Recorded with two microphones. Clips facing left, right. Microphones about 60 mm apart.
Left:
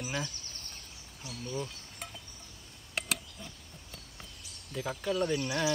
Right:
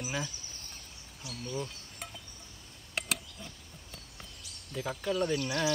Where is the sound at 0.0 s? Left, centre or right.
Centre.